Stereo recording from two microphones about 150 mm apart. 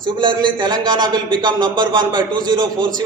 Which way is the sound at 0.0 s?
30° right (ahead or behind).